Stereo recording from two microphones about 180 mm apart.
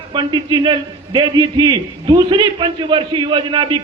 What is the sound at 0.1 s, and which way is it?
A man's voice, 25° right (ahead or behind).